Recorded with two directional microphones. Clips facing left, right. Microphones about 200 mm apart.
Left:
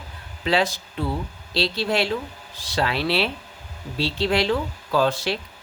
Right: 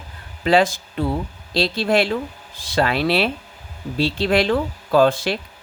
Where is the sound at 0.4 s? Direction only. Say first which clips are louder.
Right 5 dB; 50° right (ahead or behind).